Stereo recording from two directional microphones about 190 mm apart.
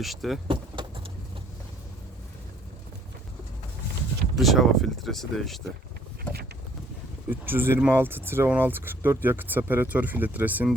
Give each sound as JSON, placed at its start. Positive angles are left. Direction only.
{"t": 0.0, "sound": "speech", "side_deg": 0}
{"t": 0.4, "sound": "vehicle", "side_deg": -25}
{"t": 4.4, "sound": "speech", "side_deg": 0}
{"t": 7.3, "sound": "speech", "side_deg": -10}